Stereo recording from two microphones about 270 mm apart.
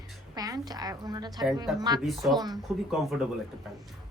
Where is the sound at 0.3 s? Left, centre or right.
Centre.